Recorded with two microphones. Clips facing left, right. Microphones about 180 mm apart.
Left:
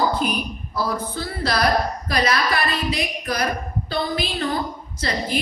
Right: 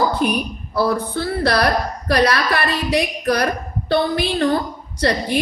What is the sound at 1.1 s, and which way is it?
A woman's voice, 65° right (ahead or behind).